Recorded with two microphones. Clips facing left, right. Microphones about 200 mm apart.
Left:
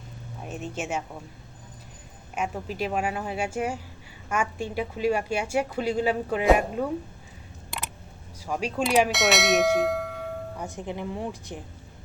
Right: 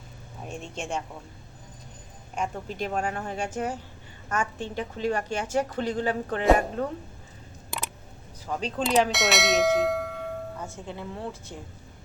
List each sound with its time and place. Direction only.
0.4 s speech: 5° left (ahead or behind)
2.3 s a woman's voice: 5° left (ahead or behind)
8.4 s a woman's voice: 10° left (ahead or behind)
9.1 s speech: centre (ahead or behind)
10.6 s a woman's voice: 15° left (ahead or behind)